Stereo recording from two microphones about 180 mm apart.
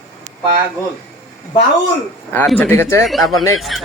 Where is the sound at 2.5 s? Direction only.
10° left (ahead or behind).